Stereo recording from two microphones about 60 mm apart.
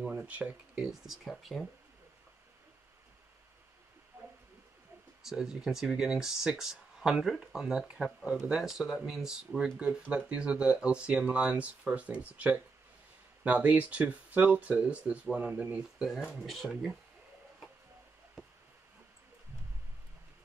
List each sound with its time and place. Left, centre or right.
0.3 s speech: centre
0.8 s speech: centre
5.2 s speech: centre
16.4 s speech: centre